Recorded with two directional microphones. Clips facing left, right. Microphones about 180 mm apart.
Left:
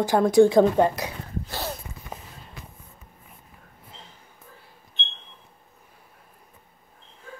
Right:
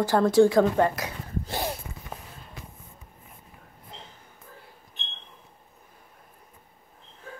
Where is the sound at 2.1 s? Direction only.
10° left (ahead or behind).